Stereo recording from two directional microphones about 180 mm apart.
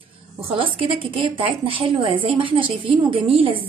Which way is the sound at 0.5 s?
30° right (ahead or behind).